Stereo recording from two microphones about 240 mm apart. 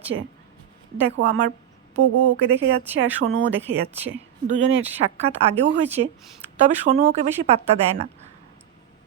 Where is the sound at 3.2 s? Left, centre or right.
Right.